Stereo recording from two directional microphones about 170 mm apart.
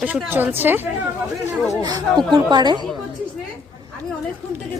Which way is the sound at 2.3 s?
25° right (ahead or behind).